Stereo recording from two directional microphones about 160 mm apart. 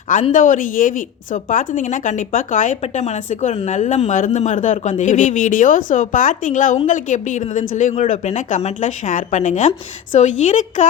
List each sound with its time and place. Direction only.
0.3 s a woman's voice: 55° left (ahead or behind)